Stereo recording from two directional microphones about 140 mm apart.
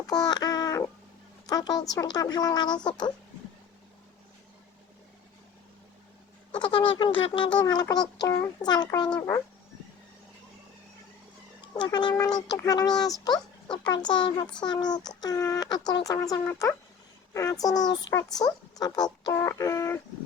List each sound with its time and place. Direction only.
0.1 s babbling: 30° left (ahead or behind)
1.5 s speech: 30° left (ahead or behind)
6.6 s speech: 35° left (ahead or behind)
7.6 s speech: 30° left (ahead or behind)
11.6 s speech: 30° left (ahead or behind)